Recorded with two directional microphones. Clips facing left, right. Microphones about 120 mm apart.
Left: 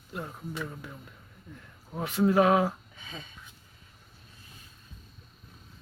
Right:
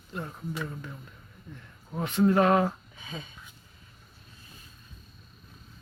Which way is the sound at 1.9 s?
5° left (ahead or behind).